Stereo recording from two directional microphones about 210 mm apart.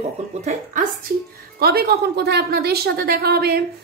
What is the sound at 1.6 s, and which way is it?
Speech, 45° right (ahead or behind).